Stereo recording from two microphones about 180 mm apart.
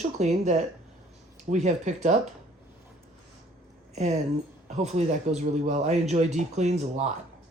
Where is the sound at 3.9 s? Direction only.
40° right (ahead or behind).